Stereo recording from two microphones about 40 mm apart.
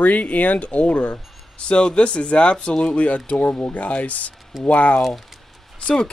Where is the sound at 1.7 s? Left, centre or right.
Left.